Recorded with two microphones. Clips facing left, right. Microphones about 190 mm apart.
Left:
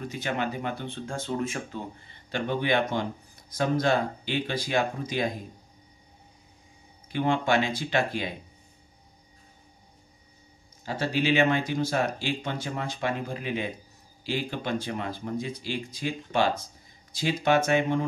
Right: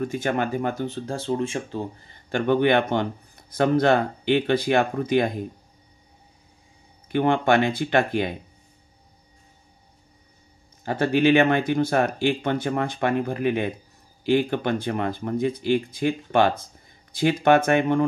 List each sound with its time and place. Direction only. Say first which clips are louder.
0.0 s speech: right 6 dB; 50° right (ahead or behind); by 1.9 s 30° right (ahead or behind)
2.2 s speech: right 8 dB; 55° right (ahead or behind)
7.1 s speech: right 5 dB; 60° right (ahead or behind)
10.9 s speech: right 7 dB; 55° right (ahead or behind)